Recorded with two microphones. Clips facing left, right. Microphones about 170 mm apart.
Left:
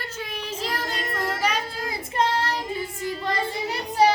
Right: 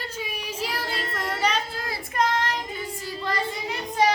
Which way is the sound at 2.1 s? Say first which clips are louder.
Left 1 dB; 30° left (ahead or behind).